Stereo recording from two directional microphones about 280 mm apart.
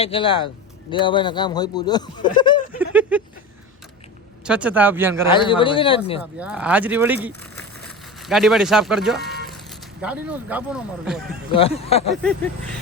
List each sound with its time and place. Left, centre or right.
0.0 s speech: centre
2.7 s a sound: centre
4.4 s speech: centre
5.3 s speech: centre
6.4 s speech: centre
11.5 s speech: left
12.2 s speech: centre